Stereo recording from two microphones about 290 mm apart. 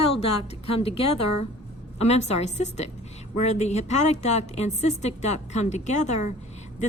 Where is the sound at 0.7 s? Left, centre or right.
Centre.